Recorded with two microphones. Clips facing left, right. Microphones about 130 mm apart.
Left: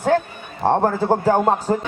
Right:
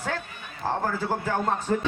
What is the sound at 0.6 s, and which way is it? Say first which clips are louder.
Speech: left 10 dB; 70° left (ahead or behind).